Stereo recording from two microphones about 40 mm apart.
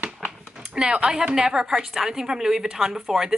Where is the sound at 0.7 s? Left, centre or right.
Centre.